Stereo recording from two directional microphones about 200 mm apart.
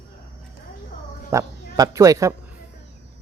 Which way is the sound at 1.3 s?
15° right (ahead or behind).